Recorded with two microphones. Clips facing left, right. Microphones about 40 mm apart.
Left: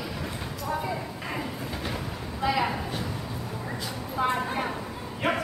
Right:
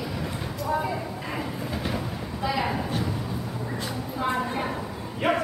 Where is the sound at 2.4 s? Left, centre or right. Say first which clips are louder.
Left 1 dB; centre.